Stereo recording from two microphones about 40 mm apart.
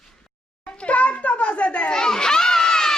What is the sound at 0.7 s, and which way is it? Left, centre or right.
Children playing, left.